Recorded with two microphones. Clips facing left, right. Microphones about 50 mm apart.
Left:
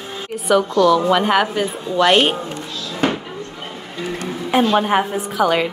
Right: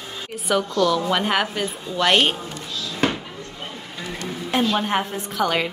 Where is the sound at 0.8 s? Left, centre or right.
Centre.